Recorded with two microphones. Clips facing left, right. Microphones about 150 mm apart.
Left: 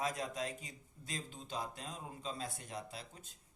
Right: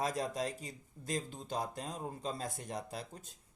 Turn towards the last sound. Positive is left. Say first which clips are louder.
# right 5 dB
turn(degrees=-45)  # may be behind; listen again after turning